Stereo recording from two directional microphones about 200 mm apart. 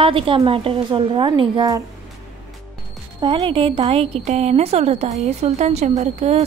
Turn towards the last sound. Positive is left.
turn(degrees=-35)  # may be behind; listen again after turning